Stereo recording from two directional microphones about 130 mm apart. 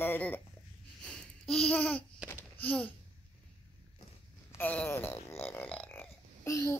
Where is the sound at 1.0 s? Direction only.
5° left (ahead or behind).